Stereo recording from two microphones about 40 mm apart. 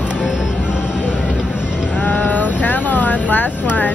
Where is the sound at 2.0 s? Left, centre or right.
Left.